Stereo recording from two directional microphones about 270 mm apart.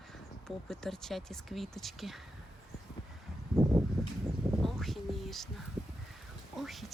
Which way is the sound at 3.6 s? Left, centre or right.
Centre.